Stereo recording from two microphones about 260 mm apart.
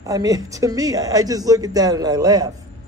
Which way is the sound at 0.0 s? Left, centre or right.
Centre.